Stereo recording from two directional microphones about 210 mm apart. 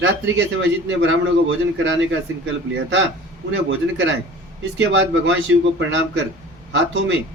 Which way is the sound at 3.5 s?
55° right (ahead or behind).